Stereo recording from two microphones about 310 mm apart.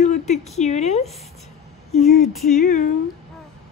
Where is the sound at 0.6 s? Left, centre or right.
Left.